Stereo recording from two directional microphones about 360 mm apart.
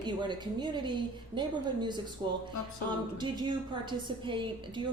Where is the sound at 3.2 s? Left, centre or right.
Centre.